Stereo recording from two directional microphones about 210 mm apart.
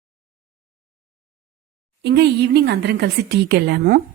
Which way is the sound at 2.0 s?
55° right (ahead or behind).